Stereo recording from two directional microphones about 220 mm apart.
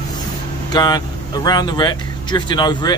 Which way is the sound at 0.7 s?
20° left (ahead or behind).